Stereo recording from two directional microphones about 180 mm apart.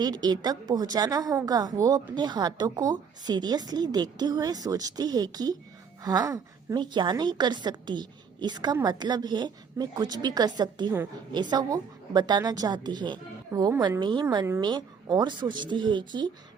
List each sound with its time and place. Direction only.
0.0 s a woman's voice: 25° right (ahead or behind)